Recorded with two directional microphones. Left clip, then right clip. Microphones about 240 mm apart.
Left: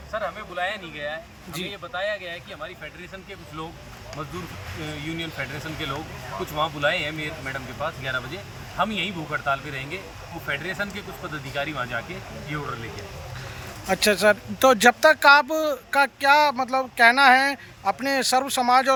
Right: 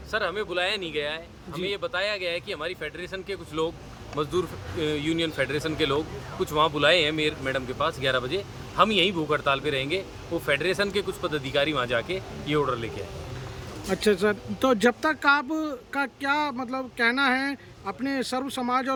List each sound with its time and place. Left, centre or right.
0.1 s a man's voice: centre
13.8 s speech: centre